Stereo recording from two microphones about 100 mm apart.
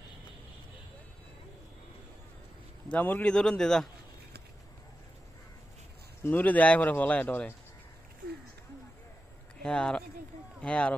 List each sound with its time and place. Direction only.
2.9 s speech: 15° left (ahead or behind)
3.3 s speech: 5° left (ahead or behind)
6.2 s speech: 15° left (ahead or behind)
9.6 s speech: 10° left (ahead or behind)